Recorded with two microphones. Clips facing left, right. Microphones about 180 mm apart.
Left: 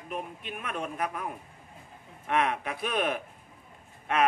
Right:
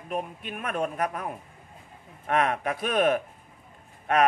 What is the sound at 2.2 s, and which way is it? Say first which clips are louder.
Speech: right 3 dB; 50° right (ahead or behind).